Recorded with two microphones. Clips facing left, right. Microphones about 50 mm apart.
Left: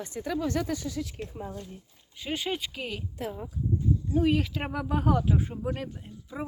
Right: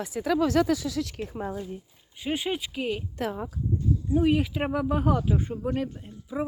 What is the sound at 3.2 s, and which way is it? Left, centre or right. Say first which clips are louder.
Speech: right 5 dB; right.